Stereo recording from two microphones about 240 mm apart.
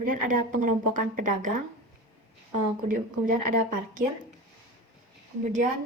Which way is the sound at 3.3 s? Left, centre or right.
Right.